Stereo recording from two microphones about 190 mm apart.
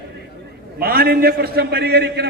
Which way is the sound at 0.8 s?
50° right (ahead or behind).